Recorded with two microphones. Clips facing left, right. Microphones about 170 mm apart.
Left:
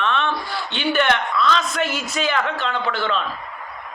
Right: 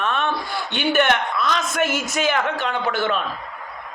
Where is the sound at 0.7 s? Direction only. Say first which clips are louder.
Right 1 dB; 50° right (ahead or behind).